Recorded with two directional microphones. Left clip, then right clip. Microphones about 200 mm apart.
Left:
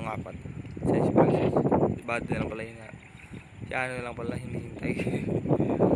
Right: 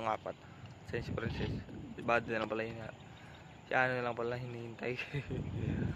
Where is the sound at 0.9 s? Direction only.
10° left (ahead or behind).